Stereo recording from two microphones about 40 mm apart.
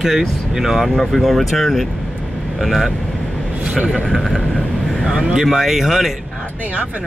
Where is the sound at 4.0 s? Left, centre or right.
Centre.